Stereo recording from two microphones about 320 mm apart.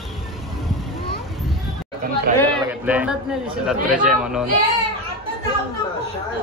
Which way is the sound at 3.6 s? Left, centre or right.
Centre.